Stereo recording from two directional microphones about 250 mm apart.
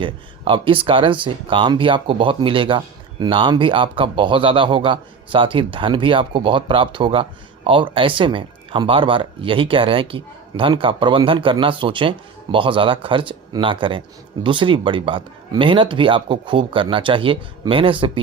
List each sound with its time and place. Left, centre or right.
0.0 s speech: centre